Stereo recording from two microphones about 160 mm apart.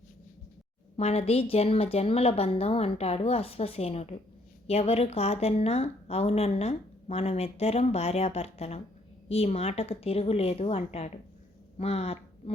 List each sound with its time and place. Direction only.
0.9 s a woman's voice: 40° left (ahead or behind)